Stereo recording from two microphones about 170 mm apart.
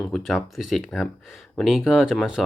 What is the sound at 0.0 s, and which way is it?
Speech, centre (ahead or behind).